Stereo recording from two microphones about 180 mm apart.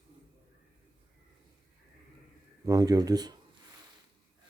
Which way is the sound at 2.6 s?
20° right (ahead or behind).